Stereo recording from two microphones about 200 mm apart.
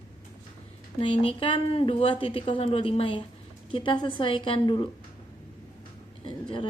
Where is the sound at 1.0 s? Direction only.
25° left (ahead or behind).